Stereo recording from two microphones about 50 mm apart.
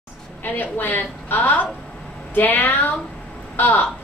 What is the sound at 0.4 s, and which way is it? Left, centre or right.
A woman's voice, left.